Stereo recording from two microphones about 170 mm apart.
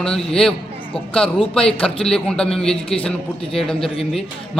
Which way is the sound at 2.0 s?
5° left (ahead or behind).